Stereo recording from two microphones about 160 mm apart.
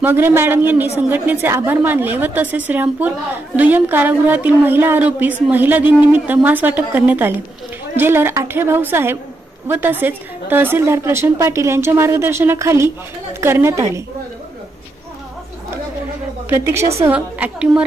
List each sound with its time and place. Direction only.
0.0 s a woman's voice: 15° right (ahead or behind)
16.4 s a woman's voice: 15° right (ahead or behind)